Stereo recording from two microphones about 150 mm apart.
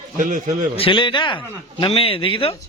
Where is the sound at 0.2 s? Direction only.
60° right (ahead or behind).